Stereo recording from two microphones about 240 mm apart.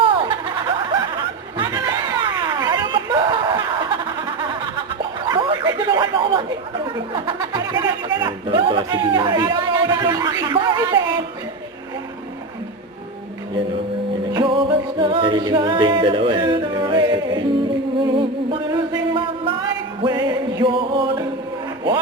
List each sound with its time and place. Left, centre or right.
0.0 s snicker: right
1.5 s chatter: centre
5.2 s a sound: right
6.8 s music: centre
14.3 s a capella: right
18.0 s music: right